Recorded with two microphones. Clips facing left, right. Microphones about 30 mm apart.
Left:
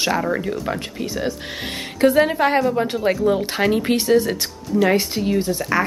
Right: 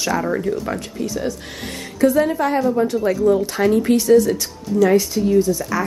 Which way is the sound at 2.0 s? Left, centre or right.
Left.